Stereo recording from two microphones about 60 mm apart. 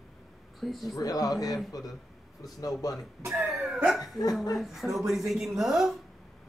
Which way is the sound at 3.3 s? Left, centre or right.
Centre.